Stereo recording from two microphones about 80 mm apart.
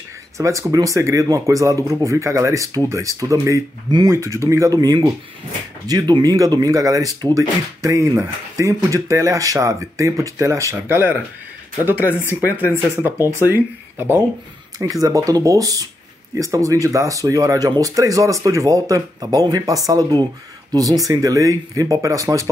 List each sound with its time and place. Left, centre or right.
0.4 s speech: right
11.8 s speech: right
14.8 s speech: right